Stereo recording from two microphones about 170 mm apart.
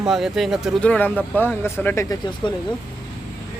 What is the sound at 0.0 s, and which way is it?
Speech, centre (ahead or behind).